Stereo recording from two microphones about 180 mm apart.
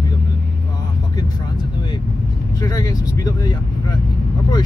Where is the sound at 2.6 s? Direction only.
20° left (ahead or behind).